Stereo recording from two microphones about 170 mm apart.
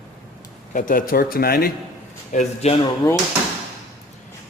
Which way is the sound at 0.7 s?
55° left (ahead or behind).